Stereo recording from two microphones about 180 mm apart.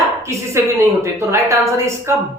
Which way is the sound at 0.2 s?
15° right (ahead or behind).